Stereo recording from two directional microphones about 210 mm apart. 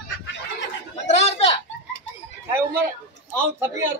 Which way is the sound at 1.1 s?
30° left (ahead or behind).